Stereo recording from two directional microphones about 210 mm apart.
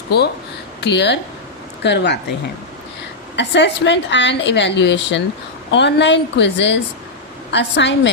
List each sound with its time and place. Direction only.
0.8 s a woman's voice: 55° left (ahead or behind)
3.3 s a woman's voice: 55° left (ahead or behind)